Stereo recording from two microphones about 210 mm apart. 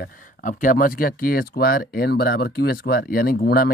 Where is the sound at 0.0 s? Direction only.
40° left (ahead or behind).